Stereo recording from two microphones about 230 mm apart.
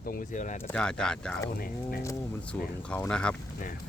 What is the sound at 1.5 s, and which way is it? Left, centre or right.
Speech, left.